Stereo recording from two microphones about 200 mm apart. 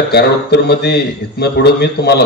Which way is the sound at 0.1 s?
55° left (ahead or behind).